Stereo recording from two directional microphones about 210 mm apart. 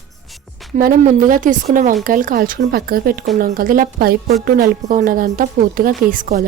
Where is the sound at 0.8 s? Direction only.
40° right (ahead or behind).